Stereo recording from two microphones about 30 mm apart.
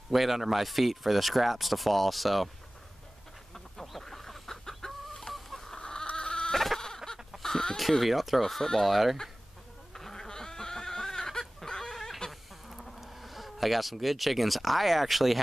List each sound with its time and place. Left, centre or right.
0.1 s speech: centre
4.0 s chicken: centre
5.8 s chicken: left
6.5 s chicken: centre
7.4 s chicken: centre
8.0 s speech: centre
8.4 s speech: centre
9.9 s fowl: centre
12.3 s goat: centre
13.0 s speech: centre